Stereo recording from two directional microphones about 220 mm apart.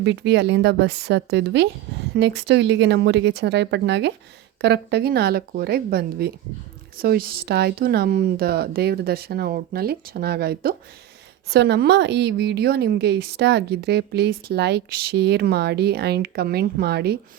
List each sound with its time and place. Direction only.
0.0 s a woman's voice: 50° right (ahead or behind)